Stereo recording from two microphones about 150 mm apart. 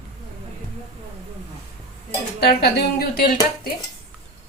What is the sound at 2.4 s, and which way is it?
Speech, 90° left.